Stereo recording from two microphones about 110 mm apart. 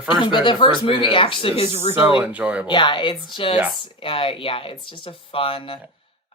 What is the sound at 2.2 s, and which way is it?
Speech, 10° right (ahead or behind).